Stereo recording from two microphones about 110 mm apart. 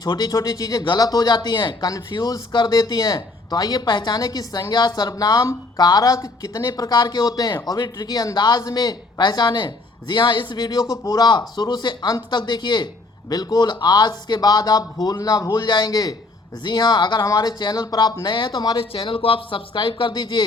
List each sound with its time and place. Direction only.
0.0 s speech: 35° left (ahead or behind)
18.8 s speech: 55° left (ahead or behind)